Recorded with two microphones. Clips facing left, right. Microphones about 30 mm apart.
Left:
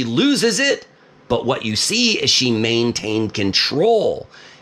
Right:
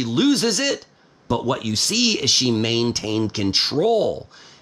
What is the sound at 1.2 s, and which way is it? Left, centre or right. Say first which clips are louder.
Speech: left 3 dB; left.